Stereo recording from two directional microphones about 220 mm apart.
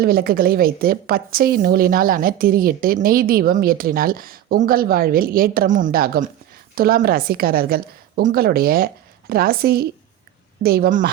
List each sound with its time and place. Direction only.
0.0 s a woman's voice: 45° right (ahead or behind)